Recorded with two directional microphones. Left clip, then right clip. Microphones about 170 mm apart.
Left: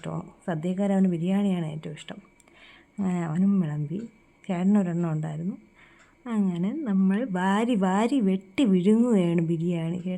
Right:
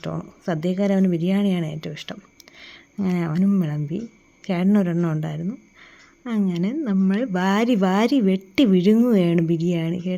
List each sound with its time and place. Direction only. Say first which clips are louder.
0.0 s speech: right 5 dB; 15° right (ahead or behind)